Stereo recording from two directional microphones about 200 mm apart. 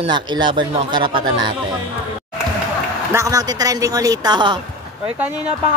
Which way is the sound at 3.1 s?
15° right (ahead or behind).